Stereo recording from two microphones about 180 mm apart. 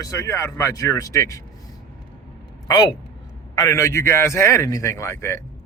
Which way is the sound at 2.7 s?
20° left (ahead or behind).